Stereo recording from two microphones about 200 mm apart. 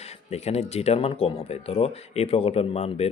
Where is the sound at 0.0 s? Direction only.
30° left (ahead or behind).